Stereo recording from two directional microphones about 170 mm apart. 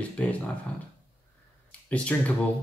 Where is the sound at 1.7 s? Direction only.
5° left (ahead or behind).